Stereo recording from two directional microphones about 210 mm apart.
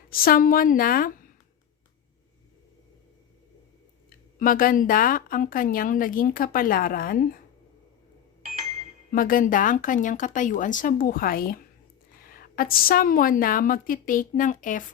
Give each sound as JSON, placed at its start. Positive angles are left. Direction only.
{"t": 0.1, "sound": "a woman's voice", "side_deg": 45}
{"t": 4.4, "sound": "speech", "side_deg": 40}
{"t": 9.1, "sound": "speech", "side_deg": 40}